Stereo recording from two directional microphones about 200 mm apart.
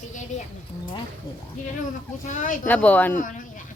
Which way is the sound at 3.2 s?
40° left (ahead or behind).